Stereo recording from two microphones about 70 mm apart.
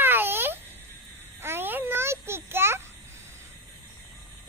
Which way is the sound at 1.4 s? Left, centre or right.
Right.